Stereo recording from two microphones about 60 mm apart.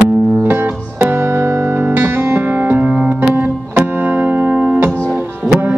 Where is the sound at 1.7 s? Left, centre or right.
Right.